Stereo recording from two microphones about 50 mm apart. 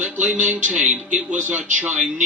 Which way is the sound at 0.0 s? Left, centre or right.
Right.